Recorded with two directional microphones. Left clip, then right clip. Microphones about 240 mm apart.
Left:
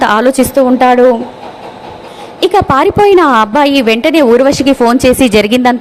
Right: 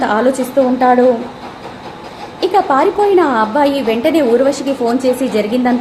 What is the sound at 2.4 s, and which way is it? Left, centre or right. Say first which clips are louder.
A woman's voice: left 4 dB; left.